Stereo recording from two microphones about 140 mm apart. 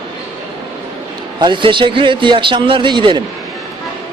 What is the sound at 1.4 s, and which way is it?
A man's voice, 35° right (ahead or behind).